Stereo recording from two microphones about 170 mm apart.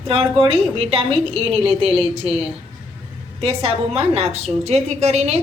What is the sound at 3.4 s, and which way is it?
A woman's voice, 35° right (ahead or behind).